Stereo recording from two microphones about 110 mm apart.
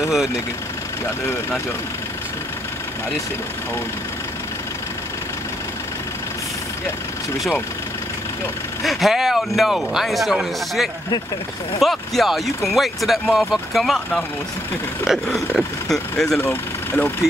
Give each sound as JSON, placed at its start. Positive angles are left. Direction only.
{"t": 8.8, "sound": "speech", "side_deg": 0}
{"t": 16.3, "sound": "speech", "side_deg": 20}